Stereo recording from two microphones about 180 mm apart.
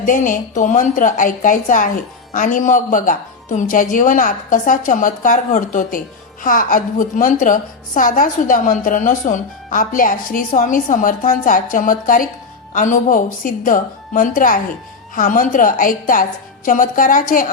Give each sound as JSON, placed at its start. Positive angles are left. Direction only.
{"t": 0.0, "sound": "a woman's voice", "side_deg": 45}